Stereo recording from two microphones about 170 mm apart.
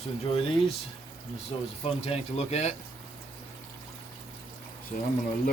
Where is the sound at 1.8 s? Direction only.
35° left (ahead or behind).